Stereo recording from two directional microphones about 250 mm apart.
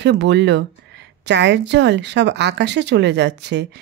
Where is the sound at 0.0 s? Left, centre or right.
Right.